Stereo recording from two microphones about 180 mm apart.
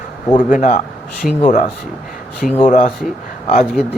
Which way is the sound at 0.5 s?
45° left (ahead or behind).